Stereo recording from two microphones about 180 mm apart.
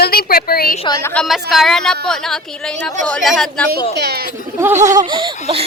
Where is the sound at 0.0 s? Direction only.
55° left (ahead or behind).